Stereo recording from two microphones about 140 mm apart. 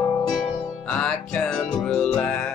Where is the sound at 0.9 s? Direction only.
5° left (ahead or behind).